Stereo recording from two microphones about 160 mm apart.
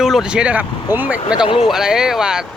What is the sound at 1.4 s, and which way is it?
Speech, 35° left (ahead or behind).